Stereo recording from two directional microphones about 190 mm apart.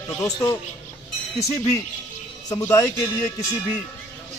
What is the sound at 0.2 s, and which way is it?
Speech, 15° left (ahead or behind).